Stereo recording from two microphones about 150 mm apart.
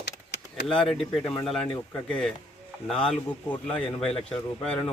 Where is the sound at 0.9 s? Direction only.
Centre (ahead or behind).